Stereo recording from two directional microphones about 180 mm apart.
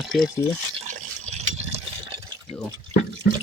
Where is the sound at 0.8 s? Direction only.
35° right (ahead or behind).